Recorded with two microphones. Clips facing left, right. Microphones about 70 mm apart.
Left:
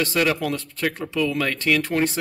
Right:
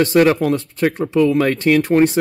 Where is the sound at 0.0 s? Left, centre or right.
Right.